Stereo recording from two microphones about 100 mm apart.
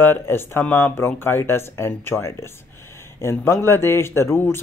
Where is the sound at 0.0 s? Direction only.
25° left (ahead or behind).